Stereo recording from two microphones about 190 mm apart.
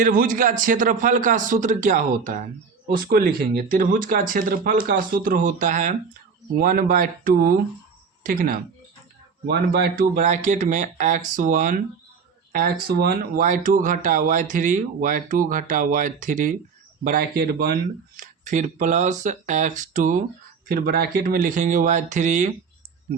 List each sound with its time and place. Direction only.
0.0 s speech: 45° right (ahead or behind)
18.2 s speech: 40° right (ahead or behind)